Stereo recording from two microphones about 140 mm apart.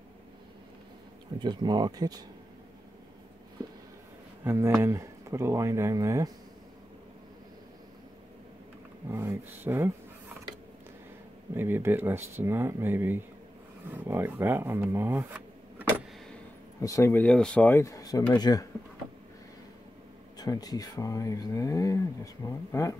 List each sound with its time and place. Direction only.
1.4 s speech: 30° right (ahead or behind)
4.5 s speech: 20° right (ahead or behind)
9.1 s speech: 15° right (ahead or behind)
11.5 s speech: 15° right (ahead or behind)
16.8 s speech: 20° left (ahead or behind)
17.2 s speech: 5° left (ahead or behind); by 18.7 s 25° left (ahead or behind)
20.3 s speech: 25° left (ahead or behind)